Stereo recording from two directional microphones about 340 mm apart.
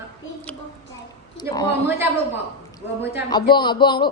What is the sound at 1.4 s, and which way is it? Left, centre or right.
Speech, centre.